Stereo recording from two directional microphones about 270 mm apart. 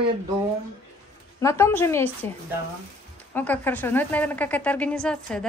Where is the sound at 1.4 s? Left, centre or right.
Centre.